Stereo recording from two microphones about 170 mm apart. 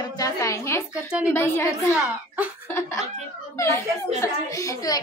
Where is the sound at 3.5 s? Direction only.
15° left (ahead or behind).